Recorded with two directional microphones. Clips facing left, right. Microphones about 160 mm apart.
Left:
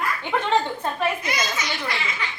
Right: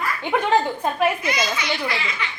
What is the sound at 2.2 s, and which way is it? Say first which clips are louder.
Speech: right 1 dB; 40° left (ahead or behind).